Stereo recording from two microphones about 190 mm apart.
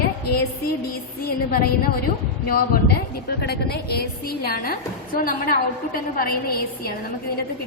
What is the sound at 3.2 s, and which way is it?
A woman's voice, 55° left (ahead or behind).